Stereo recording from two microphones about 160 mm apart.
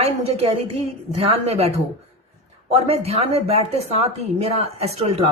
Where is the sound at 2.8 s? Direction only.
40° right (ahead or behind).